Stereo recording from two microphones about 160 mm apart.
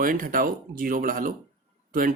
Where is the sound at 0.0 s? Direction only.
60° right (ahead or behind).